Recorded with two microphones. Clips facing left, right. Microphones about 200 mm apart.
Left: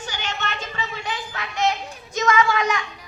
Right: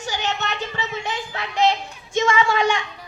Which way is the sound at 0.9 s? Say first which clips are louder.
Right 2 dB; 25° right (ahead or behind).